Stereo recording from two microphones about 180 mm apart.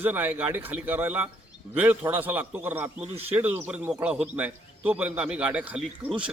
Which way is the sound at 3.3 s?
10° right (ahead or behind).